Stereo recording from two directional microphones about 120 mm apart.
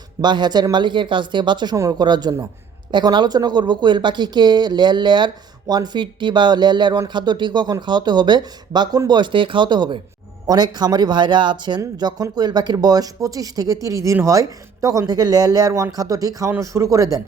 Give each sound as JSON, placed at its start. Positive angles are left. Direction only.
{"t": 0.2, "sound": "speech", "side_deg": -35}